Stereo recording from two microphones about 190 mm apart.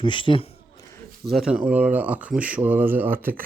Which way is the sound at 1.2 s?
5° right (ahead or behind).